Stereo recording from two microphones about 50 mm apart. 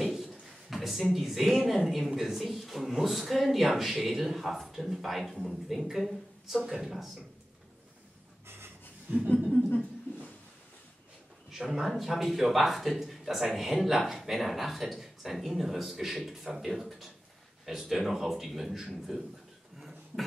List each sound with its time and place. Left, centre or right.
0.0 s a sound: centre
1.1 s a man's voice: centre
8.5 s a sound: right
9.1 s speech: right
11.5 s a man's voice: centre
19.8 s cough: centre